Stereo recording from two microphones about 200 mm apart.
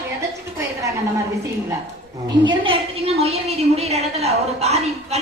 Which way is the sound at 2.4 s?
25° right (ahead or behind).